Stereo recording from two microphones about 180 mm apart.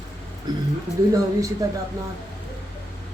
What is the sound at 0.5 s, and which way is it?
Speech, 25° right (ahead or behind).